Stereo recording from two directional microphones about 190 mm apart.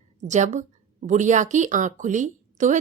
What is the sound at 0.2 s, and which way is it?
A woman's voice, 40° right (ahead or behind).